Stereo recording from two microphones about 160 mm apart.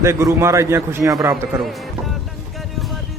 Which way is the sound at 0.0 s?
15° right (ahead or behind).